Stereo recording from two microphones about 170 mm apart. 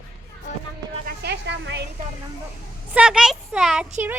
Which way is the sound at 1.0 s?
80° right.